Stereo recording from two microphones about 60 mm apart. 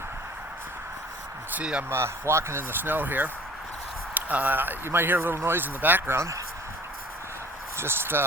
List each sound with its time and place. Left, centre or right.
1.9 s speech: right
6.1 s speech: right
7.8 s speech: right